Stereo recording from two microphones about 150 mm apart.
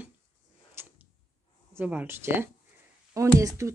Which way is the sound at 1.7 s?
10° right (ahead or behind).